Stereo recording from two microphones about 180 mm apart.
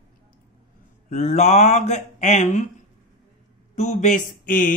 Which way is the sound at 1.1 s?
40° left (ahead or behind).